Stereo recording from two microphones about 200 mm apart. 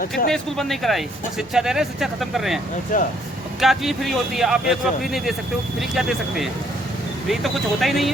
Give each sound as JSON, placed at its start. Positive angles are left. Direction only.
{"t": 0.3, "sound": "speech", "side_deg": 0}
{"t": 2.9, "sound": "speech", "side_deg": 40}
{"t": 3.6, "sound": "speech", "side_deg": 0}